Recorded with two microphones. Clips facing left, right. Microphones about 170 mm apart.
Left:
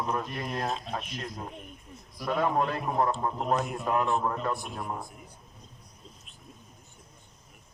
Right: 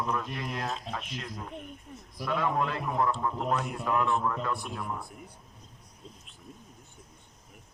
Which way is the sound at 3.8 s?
20° left (ahead or behind).